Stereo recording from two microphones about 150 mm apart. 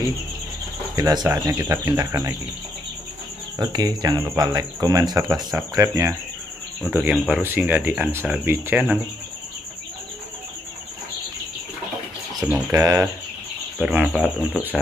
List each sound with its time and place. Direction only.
0.9 s speech: 25° right (ahead or behind)
3.5 s speech: 25° right (ahead or behind)
6.9 s speech: 10° right (ahead or behind)
12.4 s speech: 5° right (ahead or behind)
12.7 s speech: 20° right (ahead or behind)
13.7 s speech: 5° right (ahead or behind)